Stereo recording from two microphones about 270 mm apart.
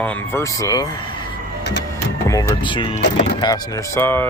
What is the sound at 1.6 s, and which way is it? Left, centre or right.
Power windows, left.